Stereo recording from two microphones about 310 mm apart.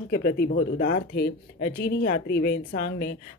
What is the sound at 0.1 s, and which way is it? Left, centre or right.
A woman's voice, left.